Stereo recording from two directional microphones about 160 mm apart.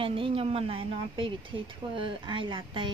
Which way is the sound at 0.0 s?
35° right (ahead or behind).